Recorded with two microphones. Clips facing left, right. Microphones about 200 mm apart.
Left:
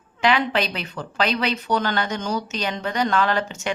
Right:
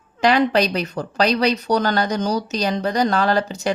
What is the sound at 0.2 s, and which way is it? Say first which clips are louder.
Speech: right 5 dB; 40° right (ahead or behind).